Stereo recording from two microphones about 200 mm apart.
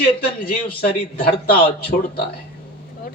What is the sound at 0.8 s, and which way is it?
Speech, 50° left (ahead or behind).